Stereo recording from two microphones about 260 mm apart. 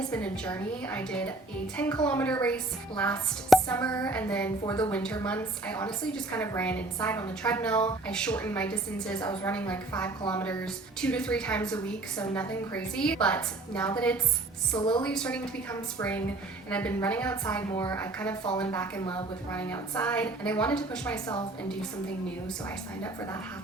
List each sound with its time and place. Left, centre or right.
0.1 s a woman's voice: centre
3.8 s speech: centre
4.0 s a woman's voice: centre
4.6 s speech: centre
4.9 s a woman's voice: centre
14.8 s speech: centre
15.0 s a woman's voice: centre
23.0 s speech: centre